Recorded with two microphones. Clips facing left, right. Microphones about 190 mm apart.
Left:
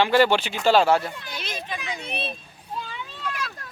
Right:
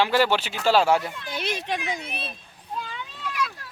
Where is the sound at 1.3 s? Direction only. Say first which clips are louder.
Right 5 dB; 60° right (ahead or behind).